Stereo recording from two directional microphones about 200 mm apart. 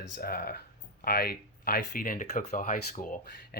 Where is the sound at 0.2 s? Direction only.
50° left (ahead or behind).